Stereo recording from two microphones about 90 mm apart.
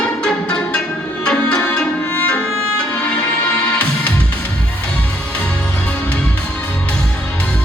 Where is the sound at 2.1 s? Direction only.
15° left (ahead or behind).